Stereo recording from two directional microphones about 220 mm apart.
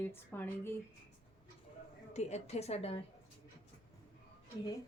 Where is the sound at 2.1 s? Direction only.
30° left (ahead or behind).